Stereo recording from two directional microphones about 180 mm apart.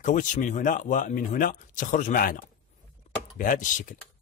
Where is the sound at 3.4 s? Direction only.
45° left (ahead or behind).